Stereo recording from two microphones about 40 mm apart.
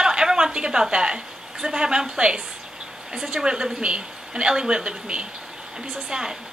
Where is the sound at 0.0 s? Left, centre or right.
Centre.